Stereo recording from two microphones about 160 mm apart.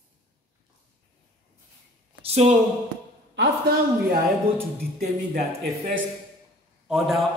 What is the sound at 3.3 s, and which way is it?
Speech, 75° right (ahead or behind).